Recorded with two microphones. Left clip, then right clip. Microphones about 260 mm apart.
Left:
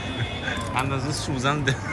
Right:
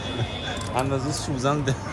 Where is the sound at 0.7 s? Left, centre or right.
Centre.